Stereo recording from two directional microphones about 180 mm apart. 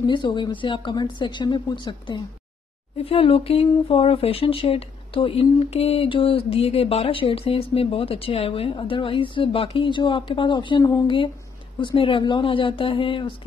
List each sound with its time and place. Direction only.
0.0 s a woman's voice: 25° left (ahead or behind)